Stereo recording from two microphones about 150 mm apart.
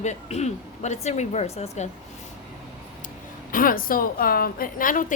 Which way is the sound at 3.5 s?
70° left (ahead or behind).